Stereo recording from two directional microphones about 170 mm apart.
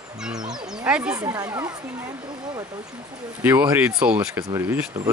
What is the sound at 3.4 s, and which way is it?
Speech, 10° right (ahead or behind).